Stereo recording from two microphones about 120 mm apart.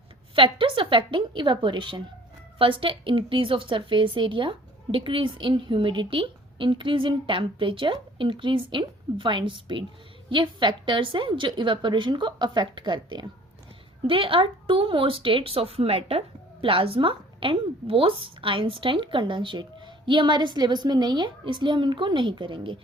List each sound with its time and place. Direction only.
0.3 s a woman's voice: 45° right (ahead or behind)